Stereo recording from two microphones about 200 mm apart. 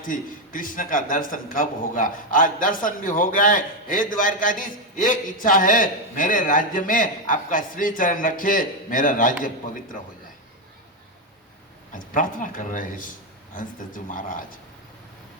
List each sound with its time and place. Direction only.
0.0 s a man's voice: 40° left (ahead or behind)
11.9 s a man's voice: 40° left (ahead or behind)